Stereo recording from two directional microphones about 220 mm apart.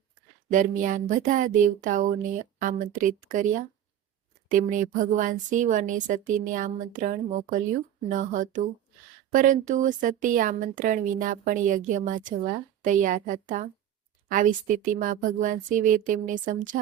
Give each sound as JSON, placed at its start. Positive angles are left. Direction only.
{"t": 0.5, "sound": "speech", "side_deg": -35}